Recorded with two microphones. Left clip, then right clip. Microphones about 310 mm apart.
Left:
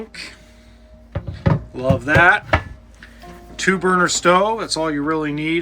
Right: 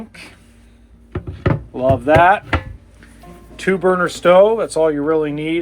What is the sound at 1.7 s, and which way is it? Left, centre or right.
Speech, centre.